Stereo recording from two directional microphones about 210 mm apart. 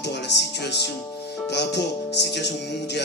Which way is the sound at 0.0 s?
55° left (ahead or behind).